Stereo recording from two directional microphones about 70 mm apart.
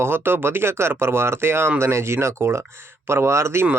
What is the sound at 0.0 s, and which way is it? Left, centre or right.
Speech, right.